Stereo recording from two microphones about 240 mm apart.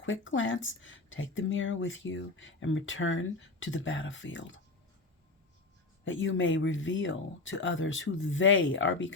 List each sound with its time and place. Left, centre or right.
0.0 s speech: left
6.1 s speech: left